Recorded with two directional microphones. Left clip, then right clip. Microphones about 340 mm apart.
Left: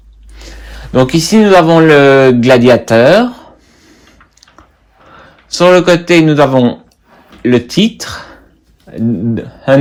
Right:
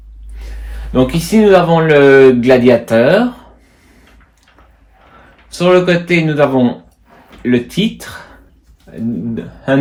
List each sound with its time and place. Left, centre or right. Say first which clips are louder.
0.9 s speech: left 4 dB; left
5.5 s speech: left 4 dB; left